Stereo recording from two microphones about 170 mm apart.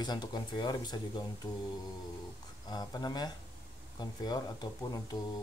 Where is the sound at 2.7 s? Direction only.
25° left (ahead or behind).